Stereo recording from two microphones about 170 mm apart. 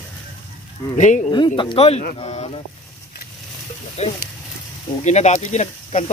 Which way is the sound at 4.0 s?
40° left (ahead or behind).